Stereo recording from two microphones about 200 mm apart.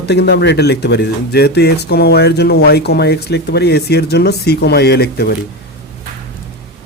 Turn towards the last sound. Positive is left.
turn(degrees=55)  # may be behind; listen again after turning